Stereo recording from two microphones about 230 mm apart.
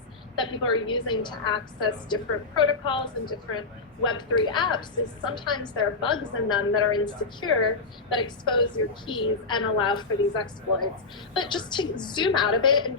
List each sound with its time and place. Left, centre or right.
0.3 s a woman's voice: left